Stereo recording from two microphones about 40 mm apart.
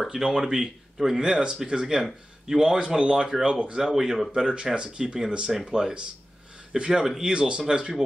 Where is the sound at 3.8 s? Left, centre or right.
Centre.